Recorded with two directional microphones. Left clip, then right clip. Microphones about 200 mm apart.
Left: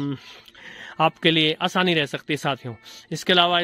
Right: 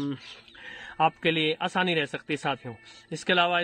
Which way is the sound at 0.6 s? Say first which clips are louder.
Left 3 dB; 40° left (ahead or behind).